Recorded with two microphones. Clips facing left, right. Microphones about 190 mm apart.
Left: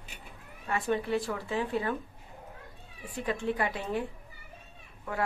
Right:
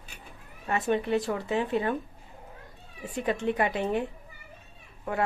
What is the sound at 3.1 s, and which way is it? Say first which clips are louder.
Speech: right 3 dB; 20° right (ahead or behind).